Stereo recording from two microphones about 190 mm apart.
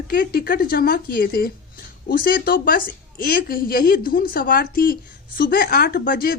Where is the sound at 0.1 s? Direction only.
55° left (ahead or behind).